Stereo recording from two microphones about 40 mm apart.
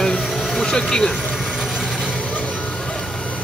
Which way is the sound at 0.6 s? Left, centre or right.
Centre.